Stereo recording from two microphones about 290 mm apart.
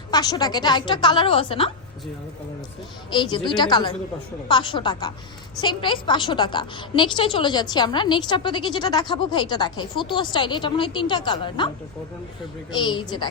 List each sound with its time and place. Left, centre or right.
0.1 s a woman's voice: centre
3.1 s a woman's voice: centre
12.7 s a woman's voice: centre